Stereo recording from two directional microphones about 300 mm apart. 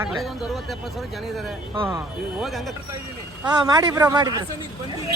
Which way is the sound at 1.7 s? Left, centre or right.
Centre.